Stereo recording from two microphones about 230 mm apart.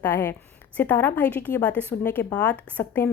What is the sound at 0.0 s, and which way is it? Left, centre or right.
A woman's voice, centre.